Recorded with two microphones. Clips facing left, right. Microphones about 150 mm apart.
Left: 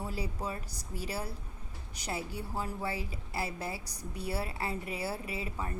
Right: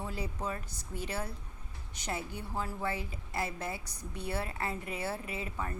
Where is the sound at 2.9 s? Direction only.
35° left (ahead or behind).